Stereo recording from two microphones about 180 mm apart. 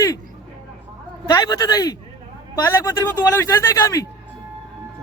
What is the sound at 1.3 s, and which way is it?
A man's voice, 20° left (ahead or behind).